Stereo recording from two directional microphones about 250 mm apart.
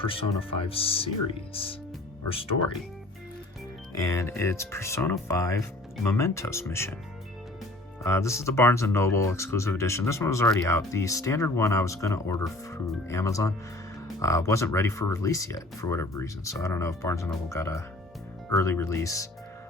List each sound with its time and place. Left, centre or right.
0.0 s speech: left
2.3 s speech: left
3.9 s speech: centre
8.0 s speech: centre